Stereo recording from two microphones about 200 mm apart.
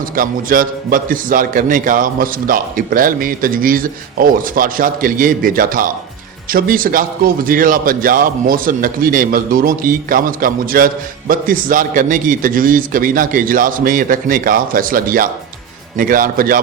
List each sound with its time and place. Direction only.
0.2 s a man's voice: 45° right (ahead or behind)